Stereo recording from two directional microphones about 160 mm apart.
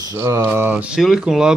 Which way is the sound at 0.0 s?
20° right (ahead or behind).